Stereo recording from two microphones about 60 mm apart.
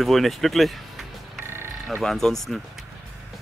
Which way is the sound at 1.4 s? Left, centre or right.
Right.